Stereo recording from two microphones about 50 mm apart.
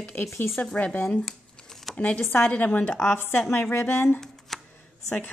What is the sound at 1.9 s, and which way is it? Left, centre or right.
Speech, left.